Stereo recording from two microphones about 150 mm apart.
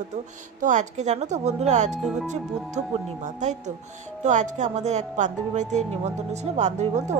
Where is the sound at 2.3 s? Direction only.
50° right (ahead or behind).